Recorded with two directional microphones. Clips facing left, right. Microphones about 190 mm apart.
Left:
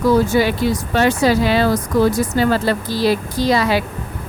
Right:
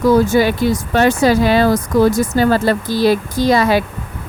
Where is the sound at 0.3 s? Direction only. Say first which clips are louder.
Right 2 dB; 45° right (ahead or behind).